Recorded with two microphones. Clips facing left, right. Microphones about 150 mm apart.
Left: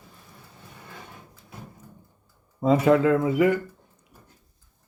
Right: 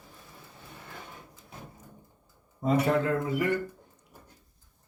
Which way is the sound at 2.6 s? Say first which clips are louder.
Left 7 dB; 90° left.